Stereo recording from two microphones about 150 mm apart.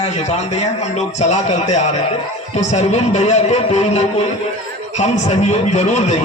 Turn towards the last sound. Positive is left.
turn(degrees=50)  # may be behind; listen again after turning